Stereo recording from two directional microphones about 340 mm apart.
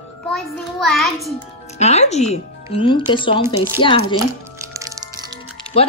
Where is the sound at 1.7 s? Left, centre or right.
Centre.